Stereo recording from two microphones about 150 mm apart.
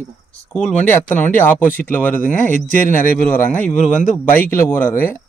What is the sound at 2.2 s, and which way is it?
Speech, 65° left (ahead or behind).